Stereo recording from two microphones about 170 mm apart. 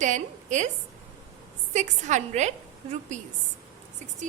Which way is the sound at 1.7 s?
45° right (ahead or behind).